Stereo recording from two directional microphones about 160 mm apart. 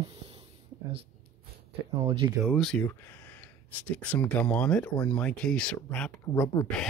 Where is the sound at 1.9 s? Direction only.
30° right (ahead or behind).